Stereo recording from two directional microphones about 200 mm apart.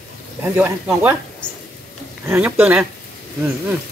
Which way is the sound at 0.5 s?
10° right (ahead or behind).